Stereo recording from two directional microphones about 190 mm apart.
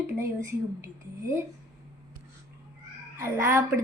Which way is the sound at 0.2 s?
15° right (ahead or behind).